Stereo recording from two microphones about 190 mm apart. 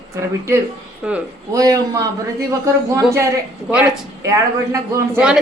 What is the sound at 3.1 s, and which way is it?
Speech, 15° right (ahead or behind).